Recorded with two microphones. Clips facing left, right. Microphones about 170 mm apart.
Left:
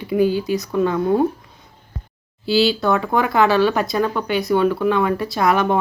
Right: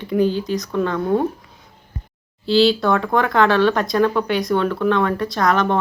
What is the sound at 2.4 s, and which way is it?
Speech, 5° left (ahead or behind).